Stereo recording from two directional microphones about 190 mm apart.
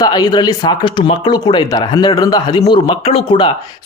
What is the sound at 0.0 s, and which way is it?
Speech, 20° left (ahead or behind).